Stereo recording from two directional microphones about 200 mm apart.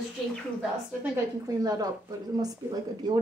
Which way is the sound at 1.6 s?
20° right (ahead or behind).